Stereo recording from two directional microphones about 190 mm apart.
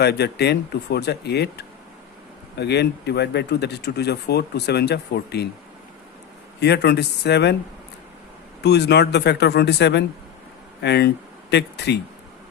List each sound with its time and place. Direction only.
0.0 s speech: 60° left (ahead or behind)
6.6 s speech: 60° left (ahead or behind)
8.6 s speech: 60° left (ahead or behind)